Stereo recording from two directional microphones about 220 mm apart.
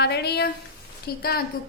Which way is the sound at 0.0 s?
50° left (ahead or behind).